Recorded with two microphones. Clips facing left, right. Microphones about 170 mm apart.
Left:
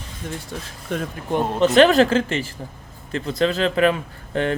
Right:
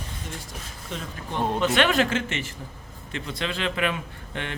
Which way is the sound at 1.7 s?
35° left (ahead or behind).